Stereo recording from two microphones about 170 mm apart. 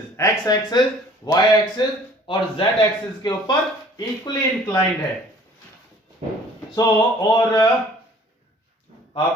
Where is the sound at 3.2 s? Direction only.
25° left (ahead or behind).